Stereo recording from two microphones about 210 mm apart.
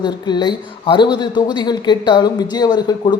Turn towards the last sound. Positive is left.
turn(degrees=20)  # may be behind; listen again after turning